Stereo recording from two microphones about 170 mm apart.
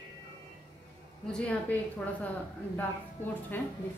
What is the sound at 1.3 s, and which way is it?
Speech, 10° left (ahead or behind).